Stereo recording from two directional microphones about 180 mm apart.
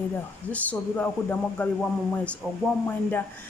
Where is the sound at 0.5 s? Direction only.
10° left (ahead or behind).